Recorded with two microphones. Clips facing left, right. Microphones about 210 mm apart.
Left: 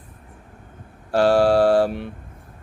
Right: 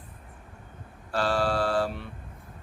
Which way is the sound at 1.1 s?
75° left (ahead or behind).